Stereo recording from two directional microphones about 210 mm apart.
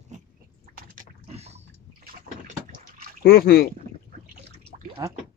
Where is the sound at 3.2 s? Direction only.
45° left (ahead or behind).